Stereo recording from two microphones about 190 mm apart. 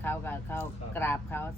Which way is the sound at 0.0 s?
10° left (ahead or behind).